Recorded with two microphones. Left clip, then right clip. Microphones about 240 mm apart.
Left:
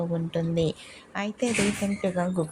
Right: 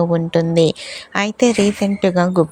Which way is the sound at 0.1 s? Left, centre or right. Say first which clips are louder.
Right 13 dB; right.